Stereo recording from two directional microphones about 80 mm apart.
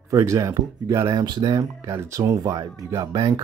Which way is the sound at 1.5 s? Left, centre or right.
Right.